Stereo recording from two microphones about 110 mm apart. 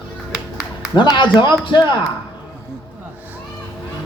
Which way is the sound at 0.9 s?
45° left (ahead or behind).